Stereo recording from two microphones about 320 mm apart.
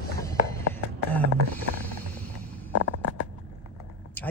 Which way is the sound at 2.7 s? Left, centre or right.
Left.